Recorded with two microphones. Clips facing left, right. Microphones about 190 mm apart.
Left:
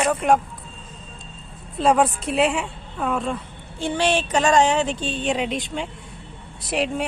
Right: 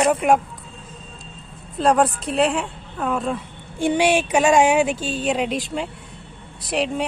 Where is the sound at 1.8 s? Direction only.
Centre (ahead or behind).